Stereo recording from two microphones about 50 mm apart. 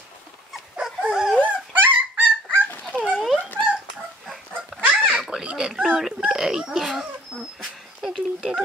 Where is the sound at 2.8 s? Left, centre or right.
Centre.